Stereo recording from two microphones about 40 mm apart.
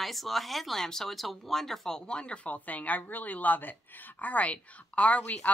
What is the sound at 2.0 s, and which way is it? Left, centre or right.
Speech, left.